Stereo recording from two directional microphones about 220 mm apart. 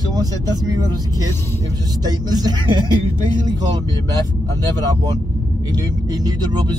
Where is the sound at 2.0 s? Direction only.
15° right (ahead or behind).